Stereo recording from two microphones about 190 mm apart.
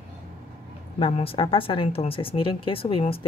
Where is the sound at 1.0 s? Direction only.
30° left (ahead or behind).